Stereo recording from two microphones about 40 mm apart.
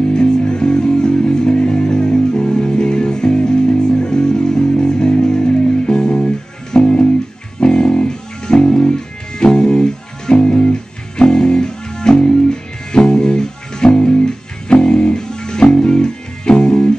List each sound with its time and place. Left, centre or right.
0.1 s music: centre